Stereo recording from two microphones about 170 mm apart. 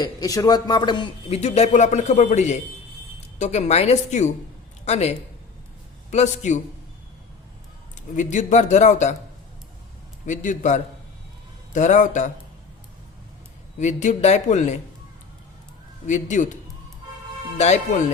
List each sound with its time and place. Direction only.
0.0 s speech: 20° left (ahead or behind)
1.4 s a man's voice: 40° left (ahead or behind)
8.1 s a man's voice: 45° left (ahead or behind)
10.2 s a man's voice: 45° left (ahead or behind)
13.7 s a man's voice: 45° left (ahead or behind)
16.0 s a man's voice: 45° left (ahead or behind)